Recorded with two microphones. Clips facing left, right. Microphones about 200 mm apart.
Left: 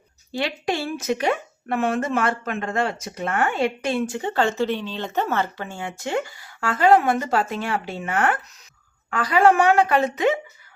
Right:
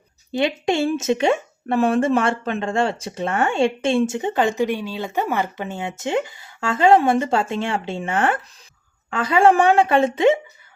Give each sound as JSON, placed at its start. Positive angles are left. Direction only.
{"t": 0.3, "sound": "speech", "side_deg": -20}